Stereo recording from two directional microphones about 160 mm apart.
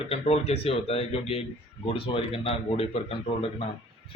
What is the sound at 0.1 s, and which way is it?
Speech, 40° left (ahead or behind).